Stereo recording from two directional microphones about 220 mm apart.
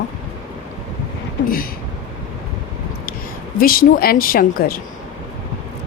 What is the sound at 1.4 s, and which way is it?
Speech, 40° left (ahead or behind).